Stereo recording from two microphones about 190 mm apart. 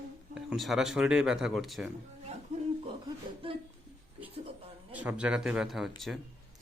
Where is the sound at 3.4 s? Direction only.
30° right (ahead or behind).